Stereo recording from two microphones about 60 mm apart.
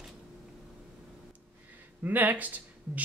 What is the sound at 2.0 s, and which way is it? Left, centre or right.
Speech, right.